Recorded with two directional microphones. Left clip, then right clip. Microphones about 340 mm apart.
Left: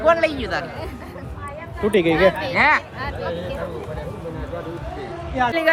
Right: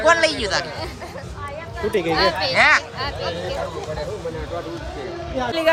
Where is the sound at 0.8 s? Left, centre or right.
Right.